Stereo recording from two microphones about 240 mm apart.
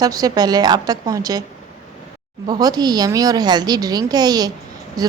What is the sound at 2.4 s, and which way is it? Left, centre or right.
Speech, centre.